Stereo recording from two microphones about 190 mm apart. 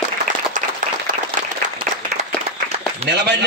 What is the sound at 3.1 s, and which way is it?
Speech, 60° right (ahead or behind).